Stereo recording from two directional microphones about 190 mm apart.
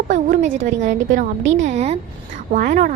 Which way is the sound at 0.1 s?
40° right (ahead or behind).